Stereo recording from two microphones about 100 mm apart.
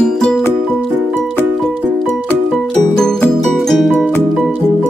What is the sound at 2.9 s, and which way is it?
Music, 5° left (ahead or behind).